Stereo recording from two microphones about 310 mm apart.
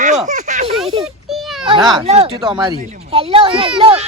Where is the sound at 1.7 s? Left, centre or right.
Centre.